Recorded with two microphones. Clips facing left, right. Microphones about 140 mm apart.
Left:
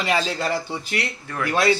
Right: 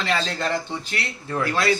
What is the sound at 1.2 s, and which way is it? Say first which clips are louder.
Speech: right 3 dB; 30° right (ahead or behind).